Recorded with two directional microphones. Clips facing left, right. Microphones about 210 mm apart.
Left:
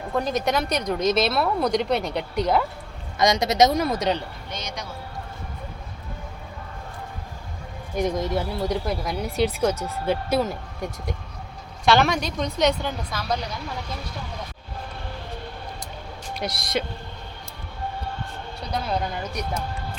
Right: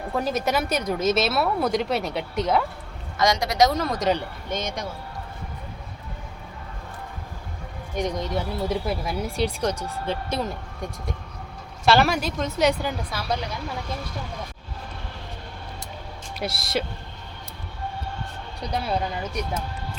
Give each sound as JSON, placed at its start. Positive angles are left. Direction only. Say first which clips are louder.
{"t": 0.2, "sound": "speech", "louder": "left 1 dB", "side_deg": -5}
{"t": 3.2, "sound": "a woman's voice", "louder": "left 2 dB", "side_deg": 20}
{"t": 3.8, "sound": "speech", "louder": "left 1 dB", "side_deg": 5}
{"t": 4.4, "sound": "speech", "louder": "right 5 dB", "side_deg": -50}
{"t": 7.9, "sound": "speech", "louder": "left 2 dB", "side_deg": 5}
{"t": 16.3, "sound": "speech", "louder": "even", "side_deg": -5}